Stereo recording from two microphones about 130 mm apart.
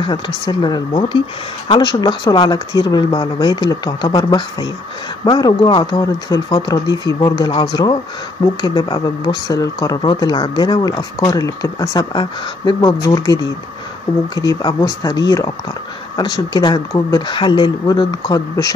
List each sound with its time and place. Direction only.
0.5 s speech: 35° left (ahead or behind)